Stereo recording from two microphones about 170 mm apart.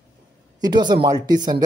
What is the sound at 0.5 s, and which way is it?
Speech, 25° right (ahead or behind).